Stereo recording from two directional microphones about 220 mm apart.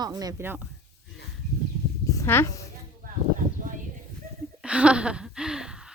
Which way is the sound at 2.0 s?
15° left (ahead or behind).